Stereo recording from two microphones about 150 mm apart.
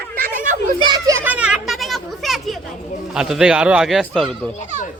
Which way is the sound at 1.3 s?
10° right (ahead or behind).